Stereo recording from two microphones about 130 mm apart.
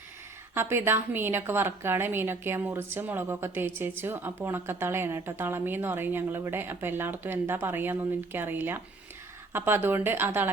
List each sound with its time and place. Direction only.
0.5 s a woman's voice: 20° right (ahead or behind)